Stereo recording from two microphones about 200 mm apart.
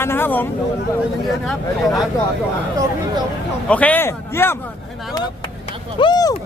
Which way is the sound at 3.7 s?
5° left (ahead or behind).